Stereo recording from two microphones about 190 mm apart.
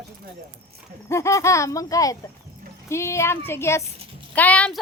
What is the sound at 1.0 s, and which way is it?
Speech, 15° left (ahead or behind).